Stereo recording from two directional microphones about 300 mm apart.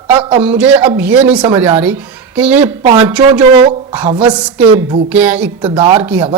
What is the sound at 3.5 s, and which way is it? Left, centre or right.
Speech, centre.